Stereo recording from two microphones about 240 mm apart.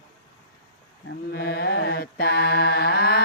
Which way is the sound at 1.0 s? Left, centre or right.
Left.